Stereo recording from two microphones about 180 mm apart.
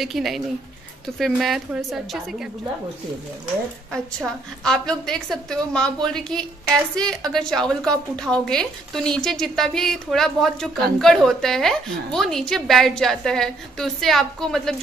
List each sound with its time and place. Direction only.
0.0 s a woman's voice: centre (ahead or behind)
3.9 s a woman's voice: 5° left (ahead or behind)